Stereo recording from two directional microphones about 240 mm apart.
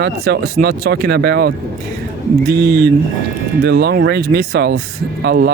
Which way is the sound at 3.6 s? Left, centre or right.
Right.